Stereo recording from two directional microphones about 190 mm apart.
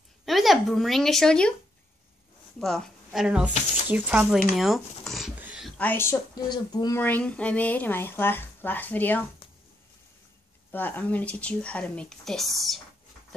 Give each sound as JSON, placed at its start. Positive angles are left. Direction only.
{"t": 0.2, "sound": "speech", "side_deg": 0}
{"t": 2.6, "sound": "a woman's voice", "side_deg": 0}
{"t": 4.6, "sound": "a sound", "side_deg": 0}
{"t": 5.8, "sound": "a woman's voice", "side_deg": 10}
{"t": 7.0, "sound": "a woman's voice", "side_deg": 10}
{"t": 10.7, "sound": "a woman's voice", "side_deg": 10}